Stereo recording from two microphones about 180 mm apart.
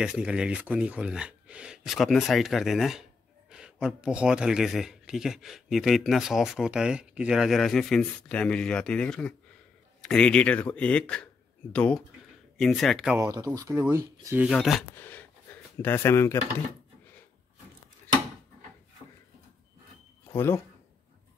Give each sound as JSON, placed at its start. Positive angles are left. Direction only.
{"t": 0.0, "sound": "speech", "side_deg": -5}
{"t": 13.2, "sound": "speech", "side_deg": -20}
{"t": 14.5, "sound": "speech", "side_deg": 0}
{"t": 20.2, "sound": "speech", "side_deg": 15}